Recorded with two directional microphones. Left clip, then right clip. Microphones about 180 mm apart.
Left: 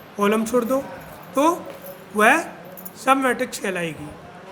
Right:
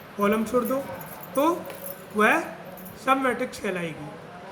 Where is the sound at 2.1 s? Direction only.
60° left (ahead or behind).